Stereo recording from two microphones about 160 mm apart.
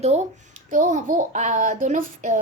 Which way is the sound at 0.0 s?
45° right (ahead or behind).